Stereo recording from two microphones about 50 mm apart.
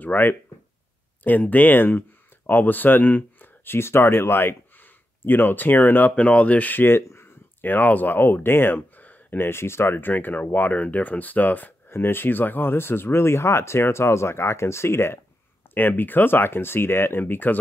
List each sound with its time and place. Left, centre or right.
0.0 s speech: left
6.1 s speech: left
7.0 s speech: left
9.4 s speech: left
11.9 s speech: left
15.7 s speech: left